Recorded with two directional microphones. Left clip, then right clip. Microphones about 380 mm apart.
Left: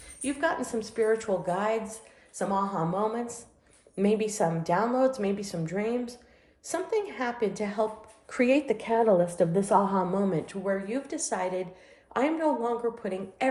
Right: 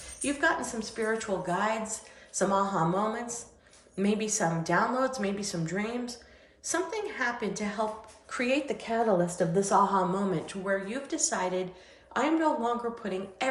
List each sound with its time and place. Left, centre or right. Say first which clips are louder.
0.2 s a woman's voice: right 1 dB; centre
2.3 s a woman's voice: right 2 dB; centre